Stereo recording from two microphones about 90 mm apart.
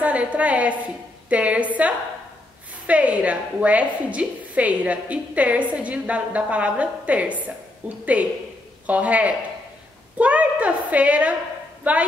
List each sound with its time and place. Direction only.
0.0 s a woman's voice: 15° right (ahead or behind)